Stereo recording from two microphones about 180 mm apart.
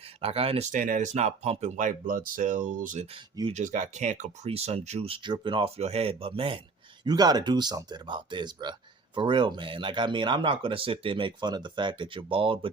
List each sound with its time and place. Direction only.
0.2 s speech: 30° right (ahead or behind)
0.8 s speech: 45° right (ahead or behind); by 12.5 s 30° right (ahead or behind)